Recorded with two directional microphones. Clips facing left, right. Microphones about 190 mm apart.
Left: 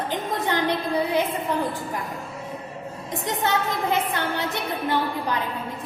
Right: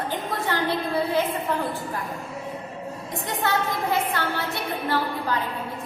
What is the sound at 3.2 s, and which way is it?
A woman's voice, 20° left (ahead or behind).